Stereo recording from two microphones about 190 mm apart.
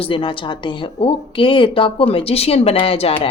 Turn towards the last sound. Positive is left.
turn(degrees=30)  # may be behind; listen again after turning